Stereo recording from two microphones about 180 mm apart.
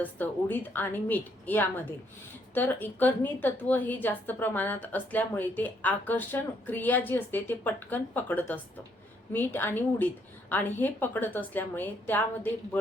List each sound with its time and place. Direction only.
0.0 s a woman's voice: 10° left (ahead or behind)